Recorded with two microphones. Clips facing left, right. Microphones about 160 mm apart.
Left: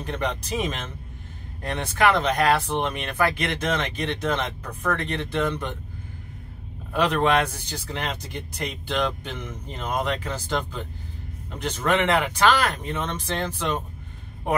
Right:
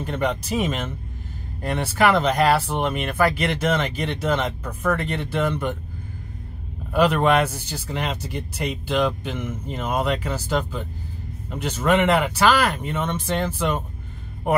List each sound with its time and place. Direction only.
0.0 s speech: 5° right (ahead or behind)
6.9 s speech: 5° right (ahead or behind)